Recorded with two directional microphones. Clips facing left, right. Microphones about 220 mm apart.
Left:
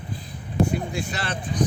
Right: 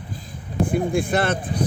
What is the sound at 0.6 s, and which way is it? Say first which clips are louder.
Speech: right 4 dB; 50° right (ahead or behind).